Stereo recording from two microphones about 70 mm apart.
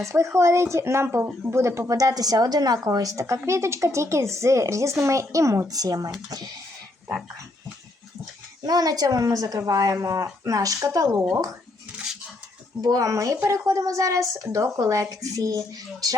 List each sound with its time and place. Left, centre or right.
0.1 s speech: right
8.6 s a woman's voice: right
12.8 s a woman's voice: right